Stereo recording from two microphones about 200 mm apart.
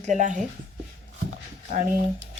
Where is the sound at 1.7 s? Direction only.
40° right (ahead or behind).